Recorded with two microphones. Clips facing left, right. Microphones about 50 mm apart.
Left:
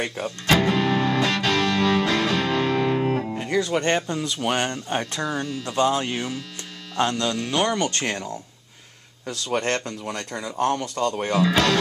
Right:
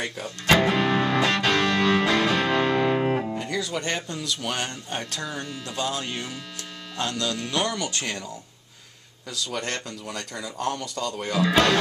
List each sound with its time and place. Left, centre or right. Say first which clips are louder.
0.5 s music: even; centre
3.4 s speech: left 6 dB; left
4.1 s speech: left 5 dB; left
5.3 s speech: left 6 dB; centre
5.9 s speech: left 6 dB; centre
7.0 s speech: left 5 dB; left
9.2 s speech: left 5 dB; left
11.3 s speech: right 1 dB; centre